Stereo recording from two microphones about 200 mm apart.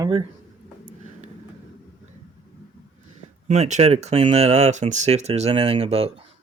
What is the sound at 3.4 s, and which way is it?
Speech, 35° right (ahead or behind).